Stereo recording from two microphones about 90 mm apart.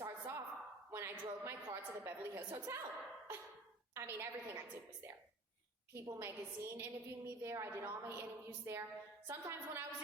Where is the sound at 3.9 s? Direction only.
30° right (ahead or behind).